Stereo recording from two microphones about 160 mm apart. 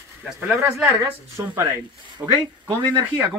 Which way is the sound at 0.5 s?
5° right (ahead or behind).